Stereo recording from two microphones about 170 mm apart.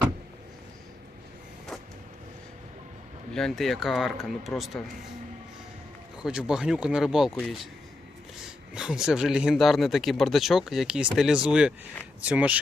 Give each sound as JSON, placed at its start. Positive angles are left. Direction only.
{"t": 3.3, "sound": "speech", "side_deg": 0}
{"t": 6.2, "sound": "speech", "side_deg": -5}